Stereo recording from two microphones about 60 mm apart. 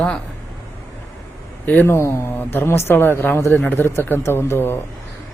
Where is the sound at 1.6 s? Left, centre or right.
Left.